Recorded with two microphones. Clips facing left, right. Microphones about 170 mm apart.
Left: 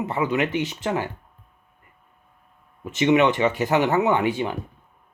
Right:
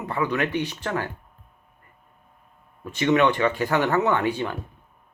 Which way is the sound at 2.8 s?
15° left (ahead or behind).